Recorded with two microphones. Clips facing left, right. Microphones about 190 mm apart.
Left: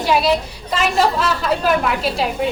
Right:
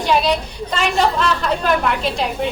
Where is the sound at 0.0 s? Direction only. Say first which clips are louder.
Left 1 dB; 5° left (ahead or behind).